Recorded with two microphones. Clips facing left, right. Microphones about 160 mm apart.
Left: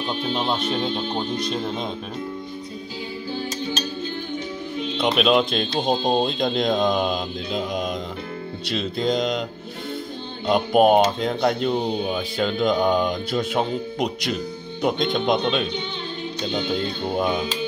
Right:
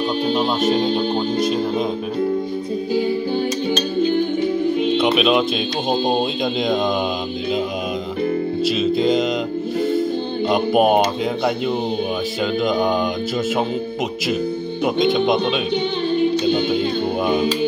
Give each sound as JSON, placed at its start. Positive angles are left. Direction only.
{"t": 0.6, "sound": "speech", "side_deg": -40}
{"t": 4.9, "sound": "speech", "side_deg": -5}
{"t": 8.6, "sound": "speech", "side_deg": 0}
{"t": 10.5, "sound": "speech", "side_deg": -5}
{"t": 14.8, "sound": "speech", "side_deg": -5}
{"t": 16.7, "sound": "speech", "side_deg": -5}